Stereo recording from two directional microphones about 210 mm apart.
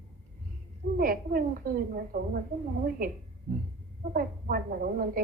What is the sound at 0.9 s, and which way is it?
A woman's voice, 45° right (ahead or behind).